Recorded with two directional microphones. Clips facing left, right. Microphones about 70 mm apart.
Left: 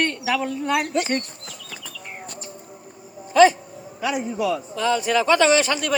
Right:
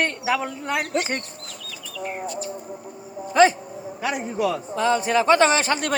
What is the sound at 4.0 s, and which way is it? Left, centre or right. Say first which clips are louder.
A man's voice: left 1 dB; right.